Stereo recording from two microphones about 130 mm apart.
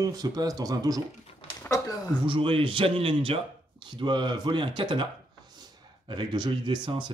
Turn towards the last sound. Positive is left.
turn(degrees=-35)  # may be behind; listen again after turning